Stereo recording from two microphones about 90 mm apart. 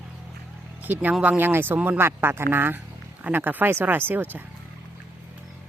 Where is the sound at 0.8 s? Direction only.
20° right (ahead or behind).